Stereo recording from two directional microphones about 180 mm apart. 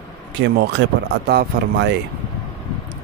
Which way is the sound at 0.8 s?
90° right.